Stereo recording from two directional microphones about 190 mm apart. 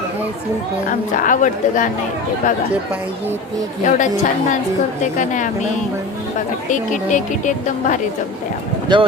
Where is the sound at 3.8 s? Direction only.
40° left (ahead or behind).